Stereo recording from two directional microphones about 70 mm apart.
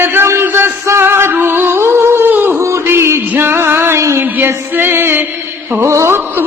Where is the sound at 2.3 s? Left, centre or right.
Right.